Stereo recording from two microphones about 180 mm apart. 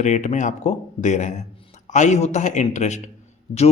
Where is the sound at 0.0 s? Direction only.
40° left (ahead or behind).